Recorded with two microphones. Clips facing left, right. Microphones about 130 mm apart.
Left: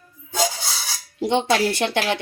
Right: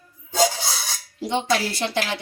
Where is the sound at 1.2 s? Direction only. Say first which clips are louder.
Left 4 dB; 65° left (ahead or behind).